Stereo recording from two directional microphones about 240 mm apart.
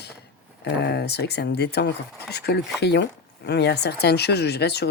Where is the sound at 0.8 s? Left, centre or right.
Left.